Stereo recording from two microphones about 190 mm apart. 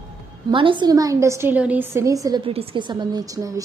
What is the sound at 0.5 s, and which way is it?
A woman's voice, 25° right (ahead or behind).